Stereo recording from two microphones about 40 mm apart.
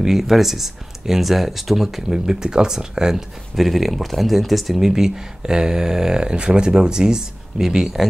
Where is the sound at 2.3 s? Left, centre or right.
Centre.